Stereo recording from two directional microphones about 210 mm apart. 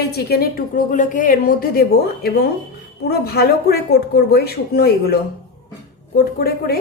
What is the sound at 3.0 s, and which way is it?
A woman's voice, 50° left (ahead or behind).